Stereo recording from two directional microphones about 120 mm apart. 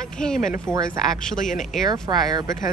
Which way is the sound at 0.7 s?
20° right (ahead or behind).